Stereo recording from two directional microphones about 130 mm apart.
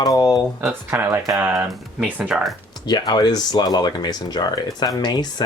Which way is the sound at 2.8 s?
35° left (ahead or behind).